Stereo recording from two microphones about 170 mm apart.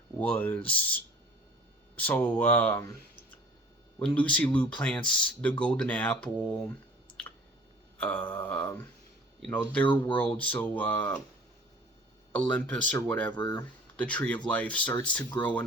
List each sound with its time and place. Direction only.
0.2 s speech: 10° left (ahead or behind)
4.0 s speech: 10° left (ahead or behind)
7.9 s speech: 10° left (ahead or behind)
9.8 s speech: 30° left (ahead or behind)
10.2 s speech: 10° left (ahead or behind)
12.3 s speech: 5° left (ahead or behind)
13.3 s speech: 25° left (ahead or behind)
13.9 s speech: 5° left (ahead or behind)
15.3 s speech: 25° left (ahead or behind)